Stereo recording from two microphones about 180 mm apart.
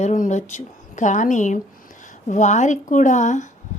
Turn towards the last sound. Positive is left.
turn(degrees=40)  # may be behind; listen again after turning